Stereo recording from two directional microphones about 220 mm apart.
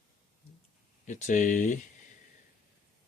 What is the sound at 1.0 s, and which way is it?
Speech, 35° left (ahead or behind).